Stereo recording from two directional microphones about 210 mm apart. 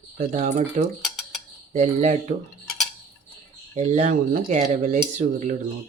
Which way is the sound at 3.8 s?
35° right (ahead or behind).